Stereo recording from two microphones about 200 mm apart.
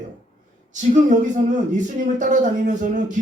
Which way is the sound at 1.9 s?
40° right (ahead or behind).